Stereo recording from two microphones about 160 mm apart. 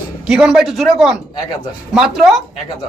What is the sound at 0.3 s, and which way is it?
Speech, centre (ahead or behind).